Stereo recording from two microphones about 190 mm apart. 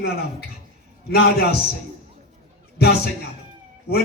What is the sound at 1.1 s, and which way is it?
Speech, 55° left (ahead or behind).